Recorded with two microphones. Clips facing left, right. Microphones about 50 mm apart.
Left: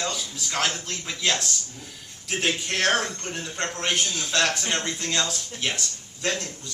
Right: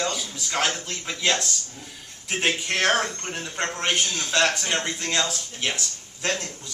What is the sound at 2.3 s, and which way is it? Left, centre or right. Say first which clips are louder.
Speech: right 1 dB; right.